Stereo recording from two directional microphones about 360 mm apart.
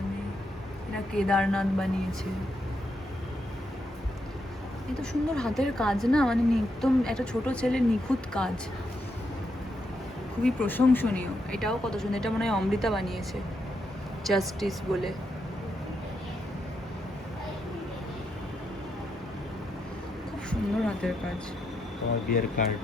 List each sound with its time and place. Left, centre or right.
1.1 s speech: centre
4.9 s speech: centre
10.4 s speech: centre
14.3 s speech: centre
20.5 s a sound: centre
22.3 s speech: left